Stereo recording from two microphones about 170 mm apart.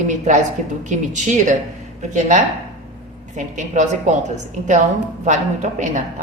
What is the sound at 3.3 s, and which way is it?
Speech, 45° right (ahead or behind).